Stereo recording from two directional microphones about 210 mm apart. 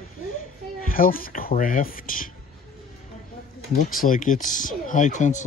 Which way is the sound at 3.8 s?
40° left (ahead or behind).